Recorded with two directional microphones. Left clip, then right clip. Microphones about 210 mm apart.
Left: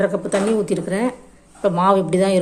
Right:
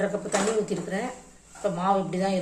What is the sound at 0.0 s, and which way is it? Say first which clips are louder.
Speech: left 7 dB; 45° left (ahead or behind).